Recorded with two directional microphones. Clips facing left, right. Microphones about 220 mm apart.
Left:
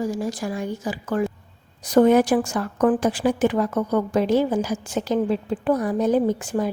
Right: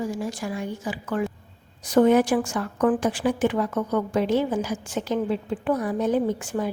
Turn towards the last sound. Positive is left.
turn(degrees=40)  # may be behind; listen again after turning